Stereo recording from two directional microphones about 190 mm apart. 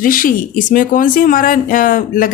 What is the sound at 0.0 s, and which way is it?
Speech, 45° left (ahead or behind).